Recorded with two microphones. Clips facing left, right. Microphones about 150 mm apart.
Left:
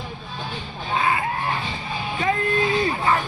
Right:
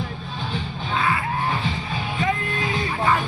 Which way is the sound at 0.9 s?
45° left (ahead or behind).